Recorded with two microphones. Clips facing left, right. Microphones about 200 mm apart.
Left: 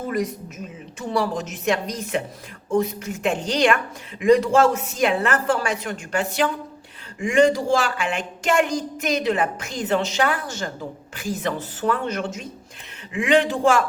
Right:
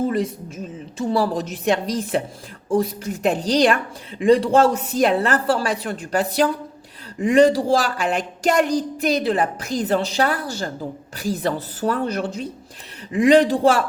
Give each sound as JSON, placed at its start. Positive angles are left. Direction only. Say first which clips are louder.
{"t": 0.1, "sound": "speech", "louder": "right 2 dB", "side_deg": -30}